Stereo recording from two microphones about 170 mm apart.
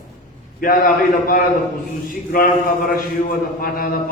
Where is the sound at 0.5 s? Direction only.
55° left (ahead or behind).